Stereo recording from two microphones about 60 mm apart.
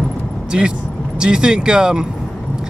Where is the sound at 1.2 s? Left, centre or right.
Centre.